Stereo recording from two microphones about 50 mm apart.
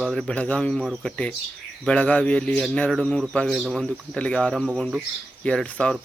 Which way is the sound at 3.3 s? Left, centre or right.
Centre.